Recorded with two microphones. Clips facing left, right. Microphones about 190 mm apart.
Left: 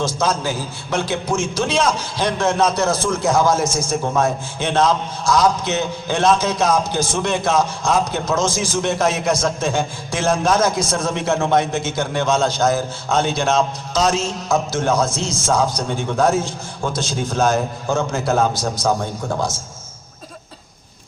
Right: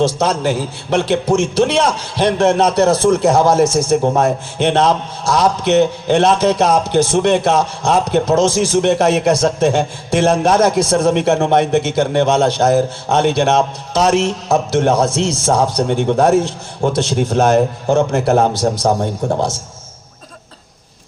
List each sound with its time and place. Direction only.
0.0 s a man's voice: 65° right (ahead or behind)
15.4 s speech: 30° right (ahead or behind)
15.7 s a man's voice: 65° right (ahead or behind)
18.8 s speech: 40° right (ahead or behind)